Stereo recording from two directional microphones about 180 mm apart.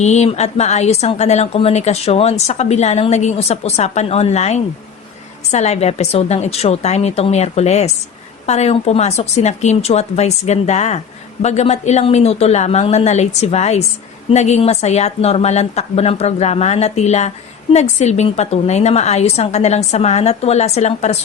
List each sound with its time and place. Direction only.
0.0 s a woman's voice: 40° left (ahead or behind)